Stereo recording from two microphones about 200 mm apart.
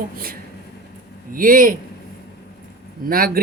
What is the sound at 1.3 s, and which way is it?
Speech, 45° right (ahead or behind).